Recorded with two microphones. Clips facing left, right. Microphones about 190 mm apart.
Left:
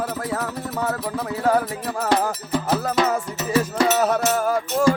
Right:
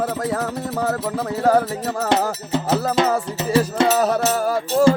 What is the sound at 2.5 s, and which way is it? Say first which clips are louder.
Speech: right 2 dB; 25° right (ahead or behind).